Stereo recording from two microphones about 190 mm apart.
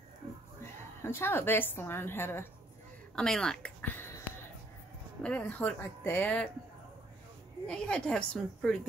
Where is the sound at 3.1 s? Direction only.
5° left (ahead or behind).